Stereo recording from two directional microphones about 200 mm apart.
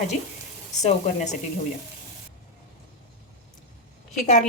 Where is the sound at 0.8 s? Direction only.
35° left (ahead or behind).